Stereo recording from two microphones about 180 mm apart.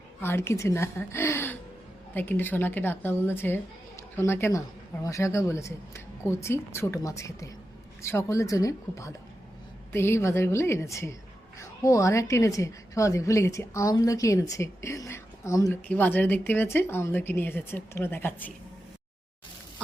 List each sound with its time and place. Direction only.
0.2 s a woman's voice: 15° left (ahead or behind)